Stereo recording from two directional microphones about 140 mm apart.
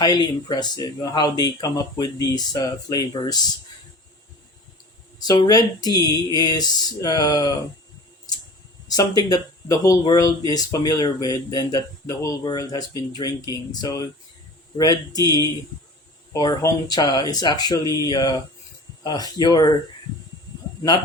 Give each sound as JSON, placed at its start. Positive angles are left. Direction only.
{"t": 0.0, "sound": "speech", "side_deg": 30}
{"t": 5.2, "sound": "speech", "side_deg": 30}
{"t": 8.9, "sound": "speech", "side_deg": 30}